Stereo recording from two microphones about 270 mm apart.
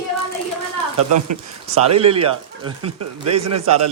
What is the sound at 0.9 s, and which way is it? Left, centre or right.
Speech, right.